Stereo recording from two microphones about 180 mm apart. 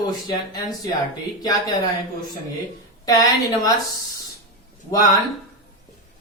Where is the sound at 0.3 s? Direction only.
20° left (ahead or behind).